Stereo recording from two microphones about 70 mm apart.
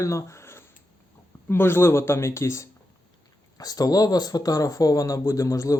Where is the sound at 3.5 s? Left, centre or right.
Left.